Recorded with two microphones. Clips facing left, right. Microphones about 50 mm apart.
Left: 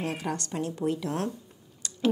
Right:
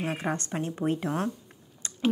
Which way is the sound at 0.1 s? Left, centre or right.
Right.